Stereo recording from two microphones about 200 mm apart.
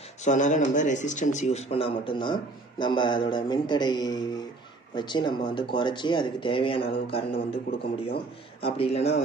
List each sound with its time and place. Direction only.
0.2 s speech: 40° left (ahead or behind)